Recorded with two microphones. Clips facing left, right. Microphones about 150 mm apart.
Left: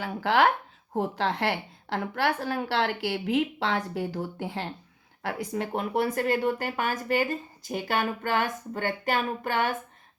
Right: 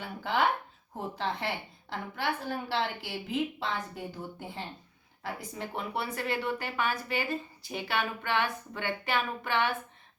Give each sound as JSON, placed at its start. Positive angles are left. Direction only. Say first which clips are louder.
{"t": 0.0, "sound": "speech", "louder": "left 6 dB", "side_deg": 90}
{"t": 0.9, "sound": "a woman's voice", "louder": "left 7 dB", "side_deg": 80}
{"t": 5.2, "sound": "speech", "louder": "left 7 dB", "side_deg": 70}